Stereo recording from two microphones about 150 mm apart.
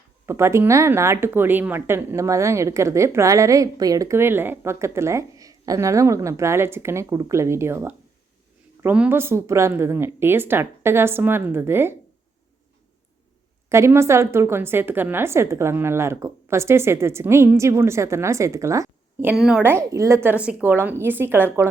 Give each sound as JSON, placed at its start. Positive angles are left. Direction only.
{"t": 0.3, "sound": "a woman's voice", "side_deg": -20}
{"t": 13.7, "sound": "a woman's voice", "side_deg": -20}
{"t": 19.4, "sound": "a woman's voice", "side_deg": -5}
{"t": 19.7, "sound": "a woman's voice", "side_deg": -20}